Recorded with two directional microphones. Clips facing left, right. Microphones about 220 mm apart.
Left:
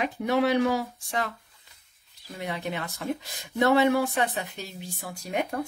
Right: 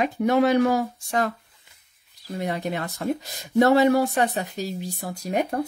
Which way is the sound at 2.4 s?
40° right (ahead or behind).